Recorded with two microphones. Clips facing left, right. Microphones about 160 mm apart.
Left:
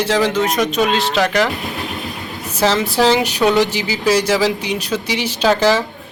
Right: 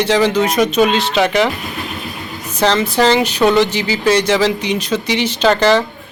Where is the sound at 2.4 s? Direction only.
5° left (ahead or behind).